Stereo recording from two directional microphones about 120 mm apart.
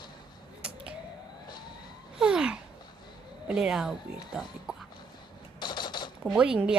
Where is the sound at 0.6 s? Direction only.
10° right (ahead or behind).